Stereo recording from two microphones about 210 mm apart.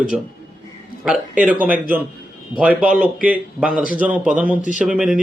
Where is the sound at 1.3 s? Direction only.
40° right (ahead or behind).